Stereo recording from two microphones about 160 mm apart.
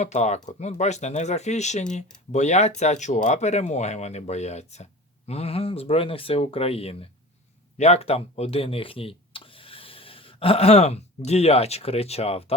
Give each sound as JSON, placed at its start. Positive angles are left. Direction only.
{"t": 0.0, "sound": "speech", "side_deg": 45}